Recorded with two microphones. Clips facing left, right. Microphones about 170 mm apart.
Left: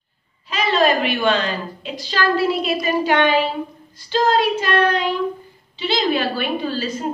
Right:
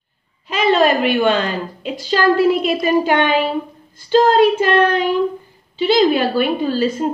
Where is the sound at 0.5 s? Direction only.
50° right (ahead or behind).